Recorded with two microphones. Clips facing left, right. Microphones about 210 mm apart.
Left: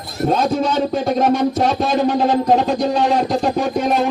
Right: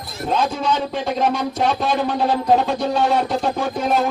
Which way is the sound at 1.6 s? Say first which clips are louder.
Left 3 dB; 40° left (ahead or behind).